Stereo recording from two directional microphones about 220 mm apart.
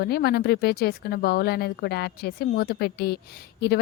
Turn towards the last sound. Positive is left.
turn(degrees=45)  # may be behind; listen again after turning